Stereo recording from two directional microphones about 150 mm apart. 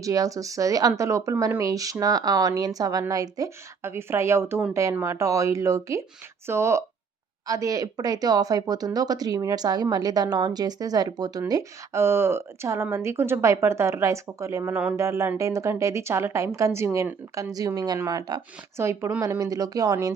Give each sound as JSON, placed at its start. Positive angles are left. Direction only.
{"t": 0.0, "sound": "speech", "side_deg": -20}